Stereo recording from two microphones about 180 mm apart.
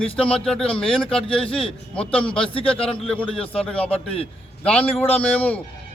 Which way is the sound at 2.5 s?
30° left (ahead or behind).